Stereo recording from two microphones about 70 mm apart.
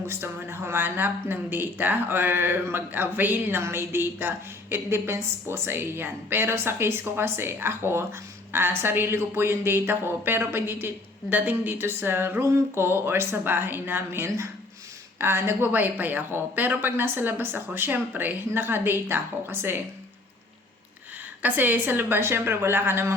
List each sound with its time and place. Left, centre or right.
0.1 s speech: right
15.7 s speech: right
21.4 s speech: right